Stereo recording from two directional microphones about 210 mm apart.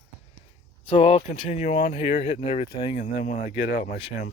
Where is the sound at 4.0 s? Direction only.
25° left (ahead or behind).